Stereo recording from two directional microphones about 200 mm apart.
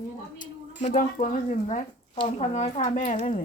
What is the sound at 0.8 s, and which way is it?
Speech, 40° left (ahead or behind).